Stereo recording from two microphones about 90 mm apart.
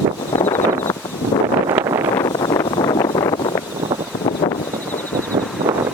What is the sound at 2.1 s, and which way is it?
Wind noise, 45° left (ahead or behind).